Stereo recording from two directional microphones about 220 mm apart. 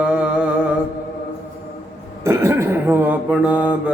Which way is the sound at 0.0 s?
5° right (ahead or behind).